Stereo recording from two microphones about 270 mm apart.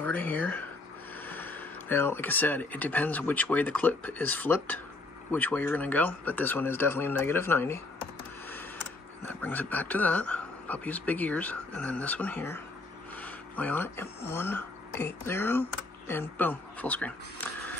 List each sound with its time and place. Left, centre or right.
0.0 s speech: centre